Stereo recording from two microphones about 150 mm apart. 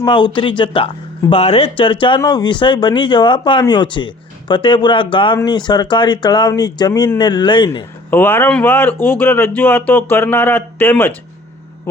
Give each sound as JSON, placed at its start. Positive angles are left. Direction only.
{"t": 0.0, "sound": "speech", "side_deg": 30}
{"t": 7.7, "sound": "speech", "side_deg": 15}